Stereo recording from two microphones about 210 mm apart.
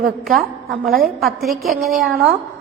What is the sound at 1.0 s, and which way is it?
A woman's voice, centre (ahead or behind).